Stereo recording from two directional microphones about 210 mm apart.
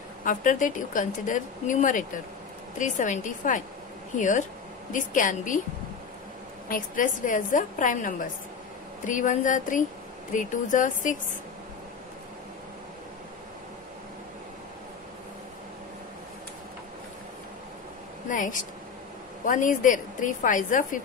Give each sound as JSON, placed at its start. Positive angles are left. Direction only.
{"t": 0.2, "sound": "speech", "side_deg": 40}
{"t": 6.7, "sound": "speech", "side_deg": 40}
{"t": 18.3, "sound": "speech", "side_deg": 40}